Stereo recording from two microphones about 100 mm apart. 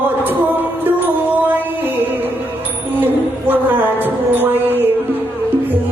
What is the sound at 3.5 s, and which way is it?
Music, 20° right (ahead or behind).